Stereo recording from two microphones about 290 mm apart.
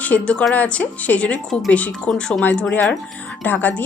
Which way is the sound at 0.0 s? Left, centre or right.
Centre.